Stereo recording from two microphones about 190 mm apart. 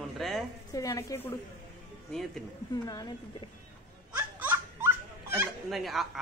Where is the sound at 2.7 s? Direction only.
20° left (ahead or behind).